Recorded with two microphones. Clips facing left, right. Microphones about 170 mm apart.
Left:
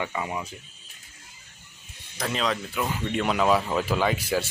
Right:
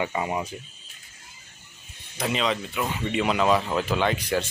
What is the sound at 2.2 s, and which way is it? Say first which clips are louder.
Speech: right 2 dB; centre (ahead or behind).